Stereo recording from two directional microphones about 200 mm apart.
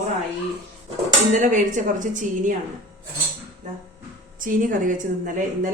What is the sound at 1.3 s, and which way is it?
Speech, 40° right (ahead or behind).